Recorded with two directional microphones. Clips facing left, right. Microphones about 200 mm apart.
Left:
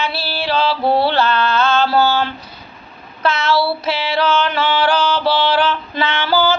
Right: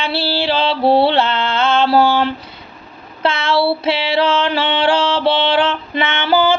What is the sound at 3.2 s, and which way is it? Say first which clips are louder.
Music: right 1 dB; 25° right (ahead or behind).